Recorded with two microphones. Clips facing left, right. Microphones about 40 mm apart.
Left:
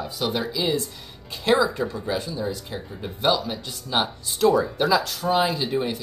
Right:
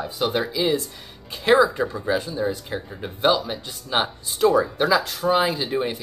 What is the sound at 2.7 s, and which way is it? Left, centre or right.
Speech, centre.